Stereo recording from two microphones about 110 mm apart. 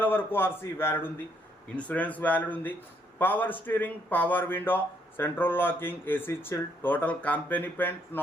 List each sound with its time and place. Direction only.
0.0 s a man's voice: 20° left (ahead or behind)